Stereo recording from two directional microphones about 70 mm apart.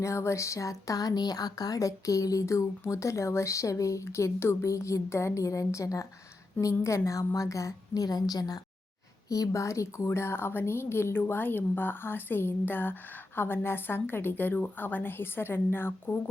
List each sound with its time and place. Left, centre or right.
0.0 s a woman's voice: left
9.3 s a woman's voice: left